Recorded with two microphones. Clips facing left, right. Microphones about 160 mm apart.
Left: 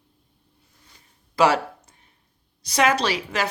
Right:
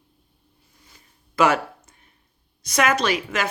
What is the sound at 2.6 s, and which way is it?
Speech, 30° left (ahead or behind).